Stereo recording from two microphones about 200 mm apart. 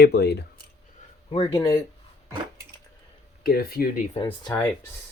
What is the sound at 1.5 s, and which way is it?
Speech, 15° left (ahead or behind).